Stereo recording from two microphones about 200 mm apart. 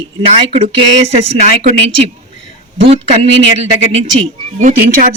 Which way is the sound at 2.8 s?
30° right (ahead or behind).